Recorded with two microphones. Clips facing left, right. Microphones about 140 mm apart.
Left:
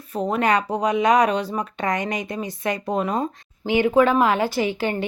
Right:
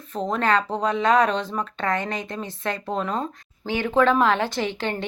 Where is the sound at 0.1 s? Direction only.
10° left (ahead or behind).